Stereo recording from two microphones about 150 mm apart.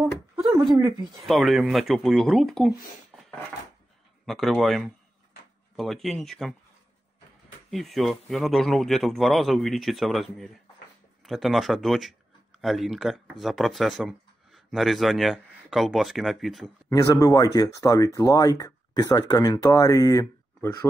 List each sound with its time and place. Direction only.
0.4 s a sound: 30° right (ahead or behind)
1.2 s speech: centre (ahead or behind)
4.3 s speech: centre (ahead or behind)
7.7 s speech: centre (ahead or behind)
16.9 s speech: 25° left (ahead or behind)